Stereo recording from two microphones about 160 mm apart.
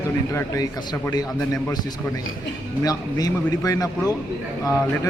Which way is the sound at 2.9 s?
20° left (ahead or behind).